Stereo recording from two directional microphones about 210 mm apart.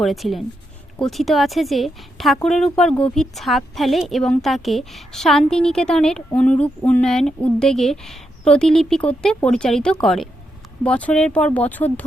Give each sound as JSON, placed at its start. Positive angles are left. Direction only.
{"t": 0.0, "sound": "a woman's voice", "side_deg": 0}